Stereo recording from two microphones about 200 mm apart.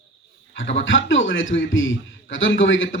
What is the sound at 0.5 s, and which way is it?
Speech, 70° left (ahead or behind).